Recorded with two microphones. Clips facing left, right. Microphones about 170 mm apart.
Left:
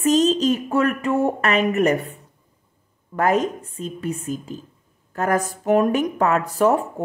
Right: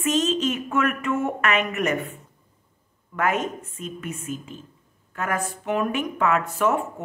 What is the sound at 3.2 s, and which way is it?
Speech, 35° left (ahead or behind).